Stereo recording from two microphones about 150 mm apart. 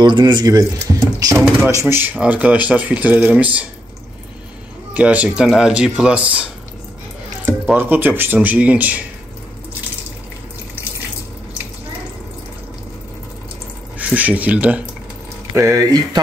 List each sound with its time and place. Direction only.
0.0 s speech: 30° right (ahead or behind); by 3.4 s 10° right (ahead or behind)
4.9 s speech: 10° right (ahead or behind)
7.7 s speech: 15° right (ahead or behind)
13.9 s speech: 10° right (ahead or behind)
15.5 s speech: 20° right (ahead or behind)